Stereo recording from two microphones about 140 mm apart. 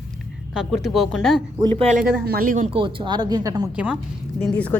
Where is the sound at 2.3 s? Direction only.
85° right.